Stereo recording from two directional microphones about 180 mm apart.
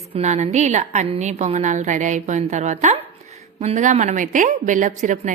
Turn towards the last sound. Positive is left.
turn(degrees=-45)  # may be behind; listen again after turning